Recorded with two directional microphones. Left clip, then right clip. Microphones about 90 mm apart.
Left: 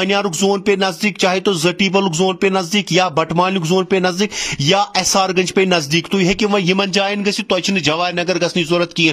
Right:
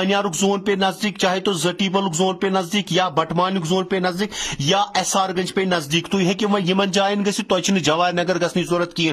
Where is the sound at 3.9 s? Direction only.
45° left (ahead or behind).